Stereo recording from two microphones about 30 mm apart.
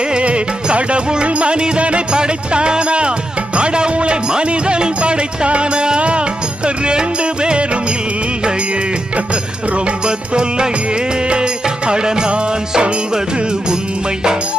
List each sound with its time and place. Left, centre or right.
0.2 s music: right
2.1 s music: right
9.1 s music: right